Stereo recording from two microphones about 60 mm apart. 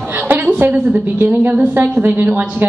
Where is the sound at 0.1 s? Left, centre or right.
Right.